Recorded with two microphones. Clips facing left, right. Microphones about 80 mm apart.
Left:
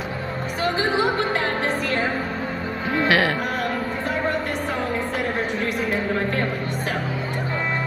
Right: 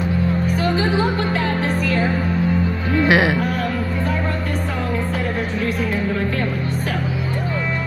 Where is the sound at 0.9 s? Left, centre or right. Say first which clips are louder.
Right 1 dB; left.